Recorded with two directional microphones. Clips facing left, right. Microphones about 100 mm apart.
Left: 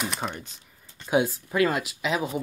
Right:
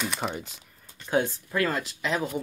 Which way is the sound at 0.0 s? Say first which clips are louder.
Even; centre (ahead or behind).